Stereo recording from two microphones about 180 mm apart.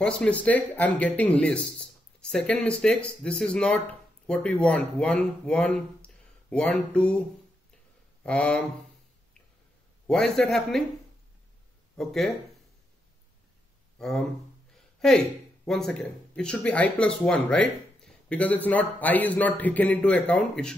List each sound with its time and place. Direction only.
0.0 s speech: 5° left (ahead or behind)
10.0 s speech: centre (ahead or behind)
12.0 s speech: centre (ahead or behind)
13.9 s speech: centre (ahead or behind)